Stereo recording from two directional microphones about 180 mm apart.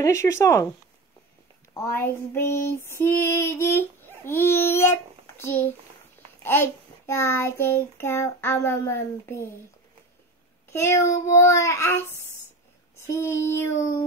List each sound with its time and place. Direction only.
0.0 s female singing: 15° left (ahead or behind)
1.7 s female singing: 15° left (ahead or behind)
10.7 s female singing: 15° left (ahead or behind)
12.9 s speech: 15° left (ahead or behind)